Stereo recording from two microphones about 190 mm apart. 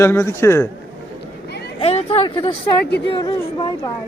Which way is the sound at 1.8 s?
30° left (ahead or behind).